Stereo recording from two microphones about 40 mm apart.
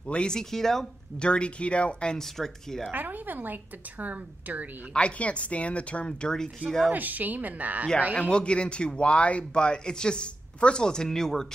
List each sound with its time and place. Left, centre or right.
0.0 s speech: left
1.2 s speech: left
2.1 s speech: centre
2.9 s a woman's voice: right
4.9 s speech: left
6.2 s speech: centre
6.9 s a woman's voice: right
8.3 s speech: left